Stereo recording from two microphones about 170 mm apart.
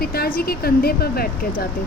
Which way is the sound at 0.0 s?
65° left (ahead or behind).